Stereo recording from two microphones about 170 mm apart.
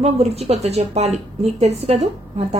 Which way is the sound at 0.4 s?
40° right (ahead or behind).